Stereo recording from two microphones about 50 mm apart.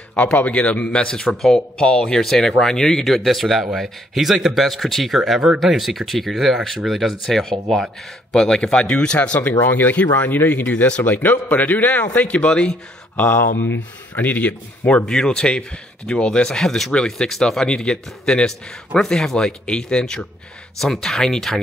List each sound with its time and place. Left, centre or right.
0.1 s a man's voice: left
9.7 s speech: left
10.4 s speech: left
10.7 s a man's voice: left
12.2 s a man's voice: left
13.1 s speech: left
15.0 s speech: centre